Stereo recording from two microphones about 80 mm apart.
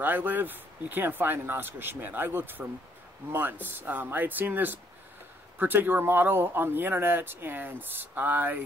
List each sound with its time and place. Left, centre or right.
0.0 s speech: right